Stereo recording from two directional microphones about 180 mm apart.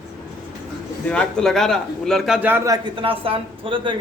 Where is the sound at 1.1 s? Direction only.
5° left (ahead or behind).